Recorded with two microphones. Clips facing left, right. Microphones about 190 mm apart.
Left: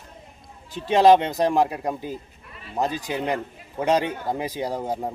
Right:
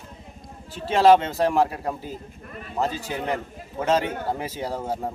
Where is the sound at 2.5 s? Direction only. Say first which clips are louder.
Right 4 dB; 45° right (ahead or behind).